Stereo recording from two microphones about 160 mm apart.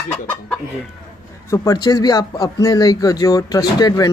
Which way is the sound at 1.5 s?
20° left (ahead or behind).